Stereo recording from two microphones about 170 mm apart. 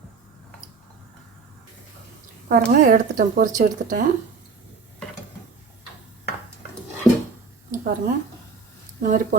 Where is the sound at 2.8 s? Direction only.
55° right (ahead or behind).